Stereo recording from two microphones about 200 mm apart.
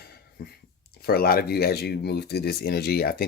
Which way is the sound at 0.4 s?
50° left (ahead or behind).